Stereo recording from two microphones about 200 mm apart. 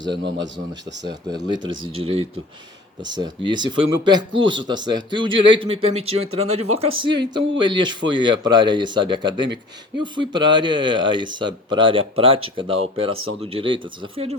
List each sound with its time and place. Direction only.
0.0 s speech: 65° right (ahead or behind)
1.0 s speech: 20° right (ahead or behind)